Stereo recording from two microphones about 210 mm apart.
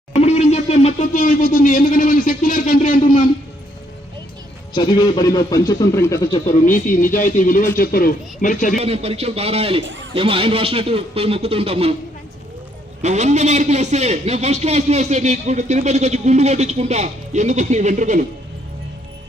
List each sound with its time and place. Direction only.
0.1 s a sound: 30° left (ahead or behind)
4.7 s a man's voice: 20° left (ahead or behind)
6.7 s speech: 40° left (ahead or behind)
8.8 s speech: 30° right (ahead or behind)
9.8 s a man's voice: 65° right (ahead or behind)
10.2 s speech: 25° right (ahead or behind)
13.0 s a man's voice: 35° right (ahead or behind)